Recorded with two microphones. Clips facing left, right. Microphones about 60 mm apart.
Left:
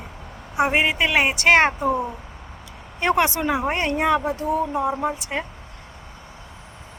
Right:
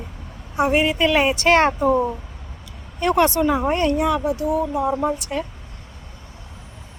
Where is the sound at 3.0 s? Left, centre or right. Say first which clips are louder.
Right 3 dB; left.